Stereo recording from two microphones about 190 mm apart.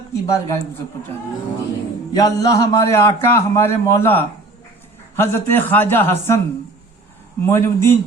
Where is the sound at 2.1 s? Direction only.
20° left (ahead or behind).